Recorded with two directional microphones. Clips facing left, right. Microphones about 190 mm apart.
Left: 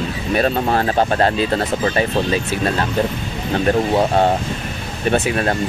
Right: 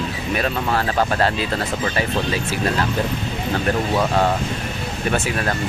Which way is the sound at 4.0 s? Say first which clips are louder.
Left 3 dB; 30° left (ahead or behind).